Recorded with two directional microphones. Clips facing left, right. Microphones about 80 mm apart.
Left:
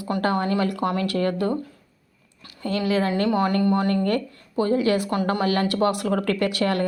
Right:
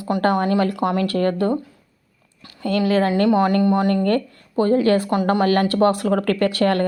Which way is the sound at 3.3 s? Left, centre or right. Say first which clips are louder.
Right 4 dB; right.